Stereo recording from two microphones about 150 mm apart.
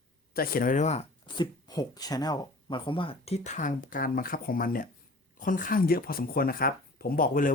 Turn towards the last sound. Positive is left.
turn(degrees=65)  # may be behind; listen again after turning